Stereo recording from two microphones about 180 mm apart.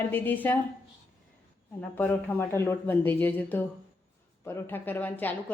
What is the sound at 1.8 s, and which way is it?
A woman's voice, 10° left (ahead or behind).